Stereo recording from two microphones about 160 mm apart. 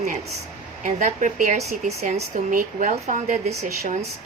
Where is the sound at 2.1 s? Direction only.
55° right (ahead or behind).